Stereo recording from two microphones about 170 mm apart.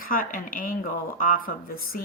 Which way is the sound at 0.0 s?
55° left (ahead or behind).